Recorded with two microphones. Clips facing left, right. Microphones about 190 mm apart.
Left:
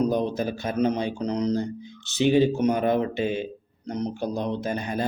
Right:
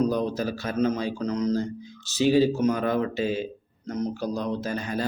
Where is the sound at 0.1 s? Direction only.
25° left (ahead or behind).